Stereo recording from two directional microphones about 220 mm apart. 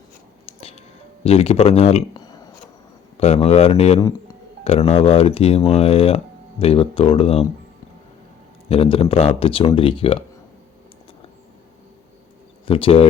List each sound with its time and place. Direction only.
0.4 s a sound: 25° left (ahead or behind)
1.2 s speech: 25° left (ahead or behind)
8.7 s speech: 25° left (ahead or behind)
12.6 s speech: 25° left (ahead or behind)